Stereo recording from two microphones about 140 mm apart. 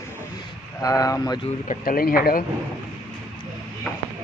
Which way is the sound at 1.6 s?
90° left.